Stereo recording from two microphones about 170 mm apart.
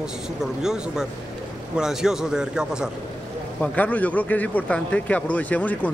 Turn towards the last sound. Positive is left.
turn(degrees=10)  # may be behind; listen again after turning